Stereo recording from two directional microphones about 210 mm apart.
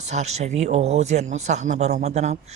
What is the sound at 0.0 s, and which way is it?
Speech, 30° right (ahead or behind).